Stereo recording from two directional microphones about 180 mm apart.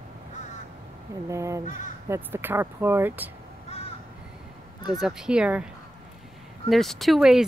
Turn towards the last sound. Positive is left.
turn(degrees=0)  # may be behind; listen again after turning